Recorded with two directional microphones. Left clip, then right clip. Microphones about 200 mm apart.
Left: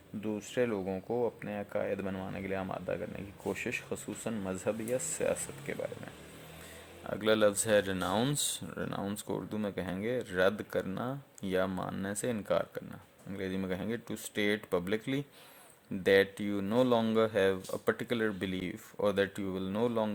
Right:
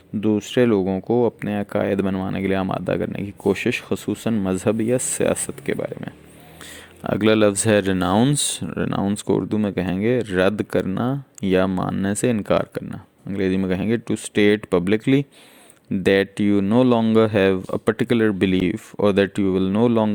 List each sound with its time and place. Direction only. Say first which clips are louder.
0.2 s speech: right 14 dB; 45° right (ahead or behind)
7.0 s speech: right 11 dB; 45° right (ahead or behind)